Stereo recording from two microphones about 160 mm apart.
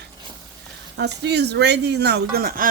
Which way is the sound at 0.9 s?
90° right.